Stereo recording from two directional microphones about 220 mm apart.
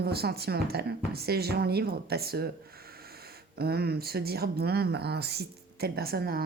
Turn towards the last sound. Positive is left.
turn(degrees=-45)  # may be behind; listen again after turning